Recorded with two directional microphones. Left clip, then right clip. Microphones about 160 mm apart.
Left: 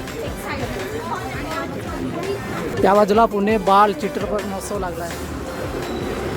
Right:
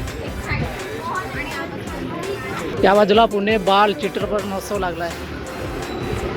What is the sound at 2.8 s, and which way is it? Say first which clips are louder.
Speech: right 1 dB; 5° left (ahead or behind).